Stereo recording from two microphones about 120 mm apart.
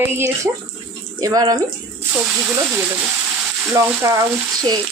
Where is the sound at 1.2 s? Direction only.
35° right (ahead or behind).